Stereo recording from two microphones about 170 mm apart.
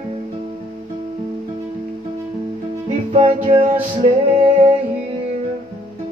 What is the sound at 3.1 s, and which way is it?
Music, 35° right (ahead or behind).